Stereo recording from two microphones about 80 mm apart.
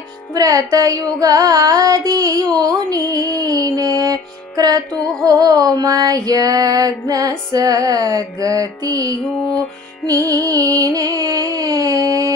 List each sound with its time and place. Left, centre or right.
0.3 s music: right
4.9 s music: centre
5.2 s music: right